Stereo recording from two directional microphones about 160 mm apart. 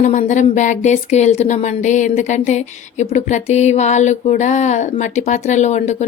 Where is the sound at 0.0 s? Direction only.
50° left (ahead or behind).